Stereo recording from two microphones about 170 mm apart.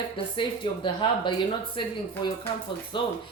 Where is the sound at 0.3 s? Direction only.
30° left (ahead or behind).